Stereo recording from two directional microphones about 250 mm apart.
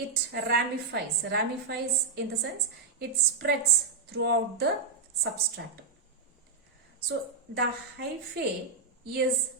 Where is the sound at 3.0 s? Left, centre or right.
Right.